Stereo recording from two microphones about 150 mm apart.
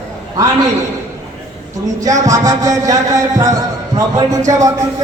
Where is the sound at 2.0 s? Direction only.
20° right (ahead or behind).